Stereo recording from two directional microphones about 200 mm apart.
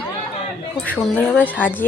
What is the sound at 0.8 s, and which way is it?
Speech, 5° left (ahead or behind).